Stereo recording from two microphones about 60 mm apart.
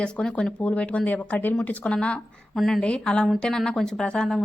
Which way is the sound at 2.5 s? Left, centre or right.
Centre.